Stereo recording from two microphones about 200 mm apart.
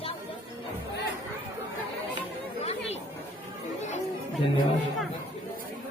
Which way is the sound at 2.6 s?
30° left (ahead or behind).